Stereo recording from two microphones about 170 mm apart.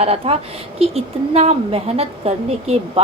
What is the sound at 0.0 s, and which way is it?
A woman's voice, 35° right (ahead or behind).